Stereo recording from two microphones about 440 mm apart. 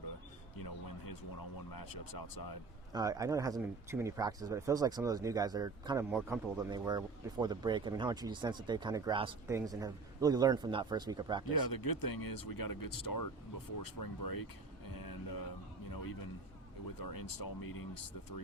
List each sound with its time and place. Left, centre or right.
0.5 s speech: left
2.9 s speech: centre
11.5 s speech: left
14.9 s music: left
17.0 s speech: left